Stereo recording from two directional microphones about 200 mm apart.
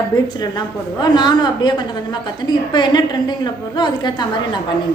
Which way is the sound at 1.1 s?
20° left (ahead or behind).